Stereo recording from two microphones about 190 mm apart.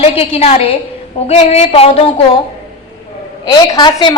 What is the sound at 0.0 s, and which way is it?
A woman's voice, 30° left (ahead or behind).